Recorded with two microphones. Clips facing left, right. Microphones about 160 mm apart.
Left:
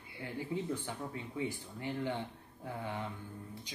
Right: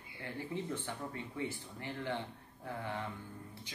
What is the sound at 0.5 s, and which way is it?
Speech, 15° left (ahead or behind).